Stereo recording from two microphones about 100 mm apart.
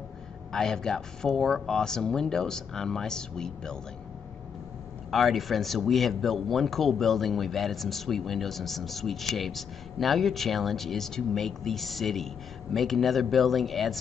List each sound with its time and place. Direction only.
0.5 s a man's voice: 5° left (ahead or behind)
5.1 s a man's voice: centre (ahead or behind)